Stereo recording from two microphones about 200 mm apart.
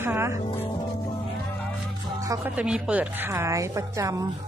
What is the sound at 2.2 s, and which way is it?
A woman's voice, 15° right (ahead or behind).